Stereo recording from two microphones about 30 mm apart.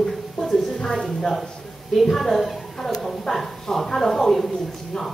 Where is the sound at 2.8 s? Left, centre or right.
Centre.